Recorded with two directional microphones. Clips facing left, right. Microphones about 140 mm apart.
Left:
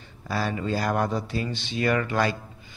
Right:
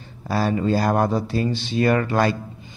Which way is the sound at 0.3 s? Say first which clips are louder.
Right 6 dB; 40° right (ahead or behind).